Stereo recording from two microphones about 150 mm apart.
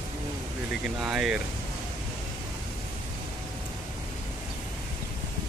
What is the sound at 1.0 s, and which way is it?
Speech, 5° right (ahead or behind).